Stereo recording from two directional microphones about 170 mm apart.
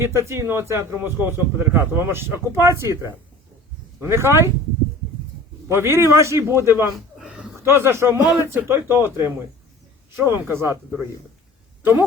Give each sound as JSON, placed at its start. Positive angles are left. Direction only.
{"t": 0.0, "sound": "a man's voice", "side_deg": -15}
{"t": 5.7, "sound": "a man's voice", "side_deg": -15}
{"t": 6.9, "sound": "a sound", "side_deg": -5}
{"t": 7.6, "sound": "a man's voice", "side_deg": -15}
{"t": 11.8, "sound": "speech", "side_deg": -15}